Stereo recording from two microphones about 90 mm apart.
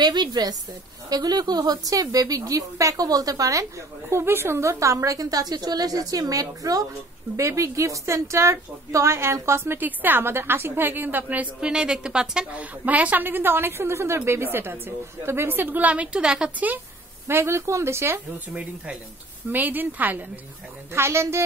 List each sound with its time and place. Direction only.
0.0 s a woman's voice: 50° right (ahead or behind)
4.1 s a woman's voice: 25° right (ahead or behind)
17.3 s a woman's voice: 30° right (ahead or behind)
19.5 s a woman's voice: 20° right (ahead or behind)